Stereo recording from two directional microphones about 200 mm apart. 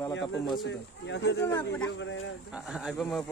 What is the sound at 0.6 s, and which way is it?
Speech, 60° left (ahead or behind).